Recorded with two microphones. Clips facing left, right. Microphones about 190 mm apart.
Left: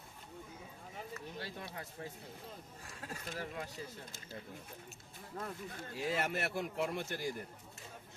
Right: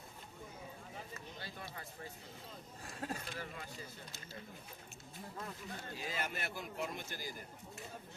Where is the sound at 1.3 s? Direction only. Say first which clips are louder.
Left 4 dB; 75° left (ahead or behind).